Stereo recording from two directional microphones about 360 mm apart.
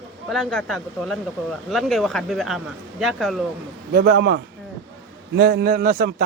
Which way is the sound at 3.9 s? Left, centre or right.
Right.